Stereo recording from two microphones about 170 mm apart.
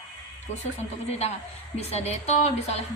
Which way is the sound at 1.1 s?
40° left (ahead or behind).